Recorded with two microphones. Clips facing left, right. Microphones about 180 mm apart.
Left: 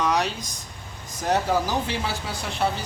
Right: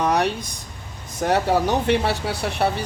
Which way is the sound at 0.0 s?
55° right (ahead or behind).